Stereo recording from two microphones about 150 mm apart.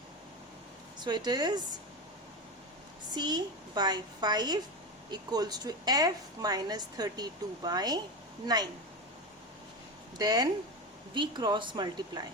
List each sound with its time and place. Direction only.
1.0 s a woman's voice: 30° right (ahead or behind)
3.2 s a woman's voice: 25° right (ahead or behind)
10.2 s a woman's voice: 25° right (ahead or behind)